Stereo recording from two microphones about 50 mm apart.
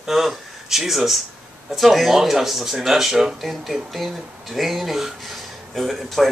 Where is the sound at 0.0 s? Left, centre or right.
Centre.